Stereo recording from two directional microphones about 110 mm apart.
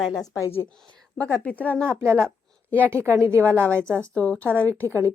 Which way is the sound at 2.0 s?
20° right (ahead or behind).